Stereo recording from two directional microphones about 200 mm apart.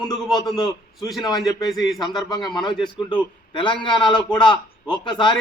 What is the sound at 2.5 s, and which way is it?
A man's voice, 20° left (ahead or behind).